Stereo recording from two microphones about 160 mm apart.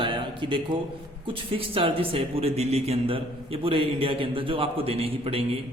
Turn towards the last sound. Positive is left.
turn(degrees=-35)  # may be behind; listen again after turning